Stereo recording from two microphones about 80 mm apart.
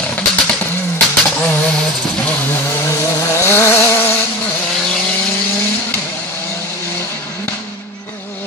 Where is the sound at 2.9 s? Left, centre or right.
Left.